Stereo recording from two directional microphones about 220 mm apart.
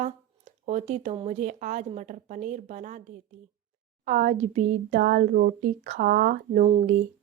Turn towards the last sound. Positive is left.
turn(degrees=-35)  # may be behind; listen again after turning